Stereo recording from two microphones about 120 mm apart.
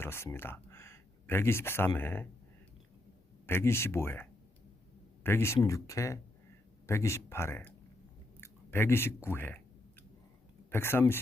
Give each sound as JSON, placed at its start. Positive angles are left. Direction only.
{"t": 0.0, "sound": "speech", "side_deg": 20}
{"t": 3.4, "sound": "speech", "side_deg": 20}
{"t": 10.7, "sound": "speech", "side_deg": 20}